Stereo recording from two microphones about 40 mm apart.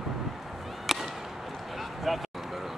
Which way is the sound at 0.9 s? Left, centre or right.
Centre.